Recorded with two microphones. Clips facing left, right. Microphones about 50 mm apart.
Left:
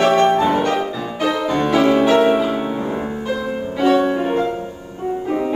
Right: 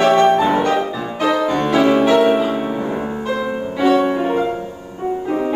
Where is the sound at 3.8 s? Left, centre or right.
Right.